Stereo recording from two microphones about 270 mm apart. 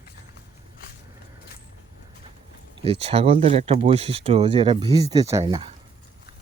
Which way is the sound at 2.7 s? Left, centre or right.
Right.